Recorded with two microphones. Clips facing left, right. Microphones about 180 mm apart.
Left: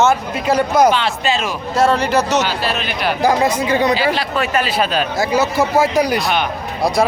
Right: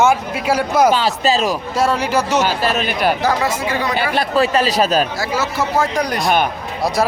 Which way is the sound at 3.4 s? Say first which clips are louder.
Left 4 dB; 20° left (ahead or behind).